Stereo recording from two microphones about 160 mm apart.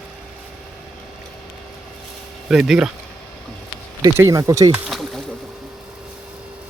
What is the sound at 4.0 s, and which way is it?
Speech, 20° right (ahead or behind).